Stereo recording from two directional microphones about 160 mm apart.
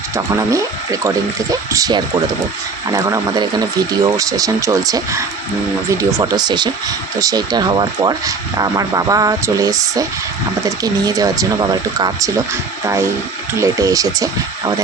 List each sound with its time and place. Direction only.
0.3 s speech: 20° right (ahead or behind)